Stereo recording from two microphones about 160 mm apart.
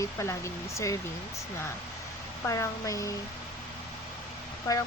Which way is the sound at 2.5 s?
20° left (ahead or behind).